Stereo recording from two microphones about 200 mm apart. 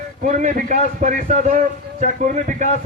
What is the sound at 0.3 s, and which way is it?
A man's voice, 40° right (ahead or behind).